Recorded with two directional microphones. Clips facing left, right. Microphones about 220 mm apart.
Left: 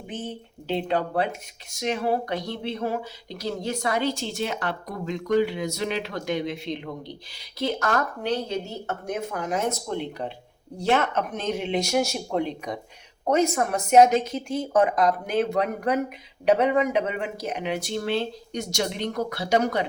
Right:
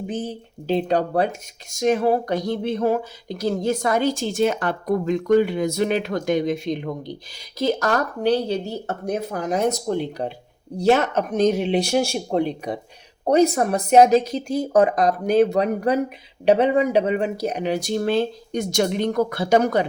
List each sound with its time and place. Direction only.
0.1 s speech: 40° right (ahead or behind)